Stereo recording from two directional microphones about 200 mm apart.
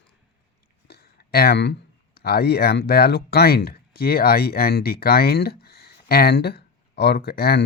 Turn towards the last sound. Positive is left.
turn(degrees=50)  # may be behind; listen again after turning